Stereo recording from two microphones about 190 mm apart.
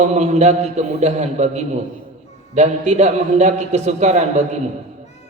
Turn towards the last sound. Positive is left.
turn(degrees=-35)  # may be behind; listen again after turning